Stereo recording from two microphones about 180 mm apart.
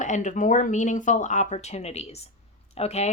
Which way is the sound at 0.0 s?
45° left (ahead or behind).